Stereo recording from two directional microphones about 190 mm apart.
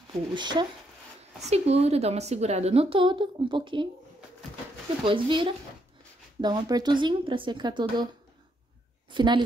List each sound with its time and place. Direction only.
0.3 s a woman's voice: 25° right (ahead or behind)
5.0 s speech: 25° right (ahead or behind)
9.1 s speech: 25° right (ahead or behind)